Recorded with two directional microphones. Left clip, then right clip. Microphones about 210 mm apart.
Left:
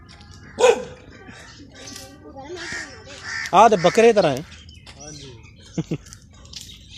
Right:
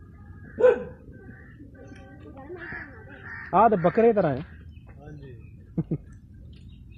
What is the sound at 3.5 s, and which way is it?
Speech, 15° left (ahead or behind).